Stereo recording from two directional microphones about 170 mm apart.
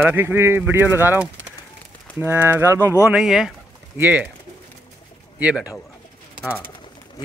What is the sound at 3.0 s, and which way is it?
Speech, 5° right (ahead or behind).